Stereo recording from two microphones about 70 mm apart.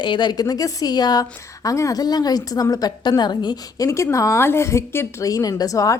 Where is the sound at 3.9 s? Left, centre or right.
Left.